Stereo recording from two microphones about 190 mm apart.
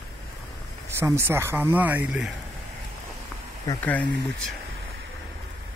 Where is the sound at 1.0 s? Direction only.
15° right (ahead or behind).